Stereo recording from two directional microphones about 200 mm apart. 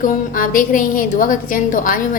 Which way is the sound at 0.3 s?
45° left (ahead or behind).